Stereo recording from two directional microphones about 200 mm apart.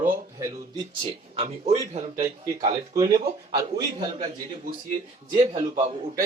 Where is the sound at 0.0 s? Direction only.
15° right (ahead or behind); by 2.2 s 35° right (ahead or behind).